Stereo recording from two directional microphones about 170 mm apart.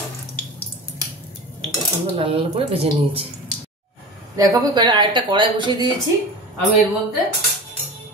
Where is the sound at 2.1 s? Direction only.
30° right (ahead or behind).